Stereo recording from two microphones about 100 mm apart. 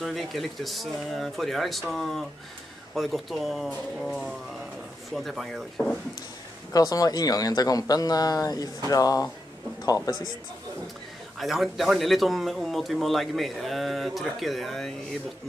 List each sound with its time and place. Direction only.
0.0 s speech: centre (ahead or behind)
6.7 s speech: 40° left (ahead or behind)
11.3 s speech: centre (ahead or behind)